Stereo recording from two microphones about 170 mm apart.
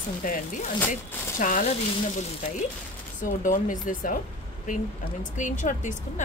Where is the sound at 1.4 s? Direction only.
50° left (ahead or behind).